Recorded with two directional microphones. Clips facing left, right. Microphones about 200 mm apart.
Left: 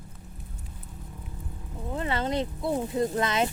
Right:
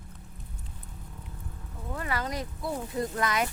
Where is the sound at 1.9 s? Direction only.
25° left (ahead or behind).